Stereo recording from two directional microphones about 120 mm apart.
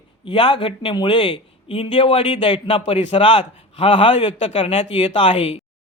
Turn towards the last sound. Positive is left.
turn(degrees=50)  # may be behind; listen again after turning